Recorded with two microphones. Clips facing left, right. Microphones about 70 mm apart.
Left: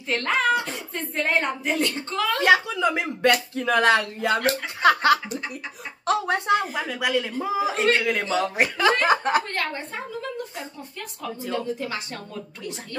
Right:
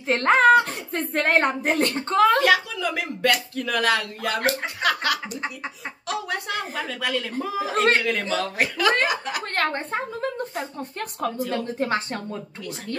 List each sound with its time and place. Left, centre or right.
0.1 s speech: right
0.9 s a woman's voice: right
2.0 s speech: right
2.4 s speech: left
6.7 s a woman's voice: centre
9.0 s speech: left
9.6 s a woman's voice: right
11.8 s speech: right